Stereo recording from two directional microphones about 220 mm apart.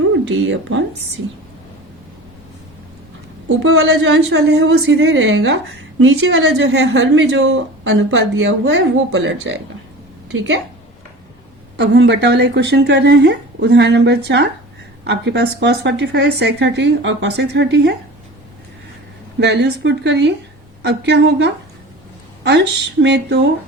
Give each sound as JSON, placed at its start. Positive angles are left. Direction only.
{"t": 0.3, "sound": "a woman's voice", "side_deg": -55}
{"t": 3.6, "sound": "a woman's voice", "side_deg": -60}
{"t": 11.8, "sound": "a woman's voice", "side_deg": -50}
{"t": 19.4, "sound": "a woman's voice", "side_deg": -50}